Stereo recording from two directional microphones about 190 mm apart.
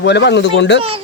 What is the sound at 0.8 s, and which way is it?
Speech, 30° right (ahead or behind).